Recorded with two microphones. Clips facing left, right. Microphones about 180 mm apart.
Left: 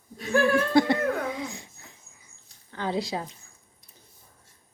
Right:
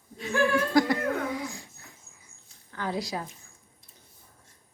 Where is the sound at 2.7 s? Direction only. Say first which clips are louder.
Left 3 dB; 25° left (ahead or behind).